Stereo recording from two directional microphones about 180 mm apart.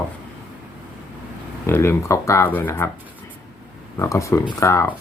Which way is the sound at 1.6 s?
15° left (ahead or behind).